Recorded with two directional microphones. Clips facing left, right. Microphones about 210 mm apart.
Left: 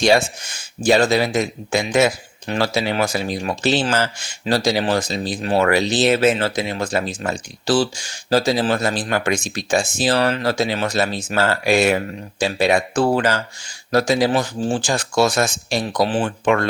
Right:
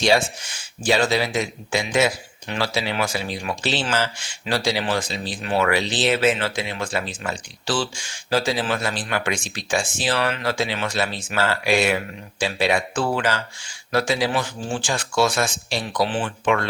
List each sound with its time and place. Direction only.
0.9 s speech: 40° left (ahead or behind)